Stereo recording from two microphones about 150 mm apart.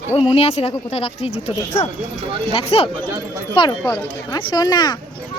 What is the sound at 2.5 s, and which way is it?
Speech, 40° left (ahead or behind).